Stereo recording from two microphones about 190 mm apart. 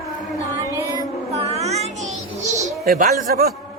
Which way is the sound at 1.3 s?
35° right (ahead or behind).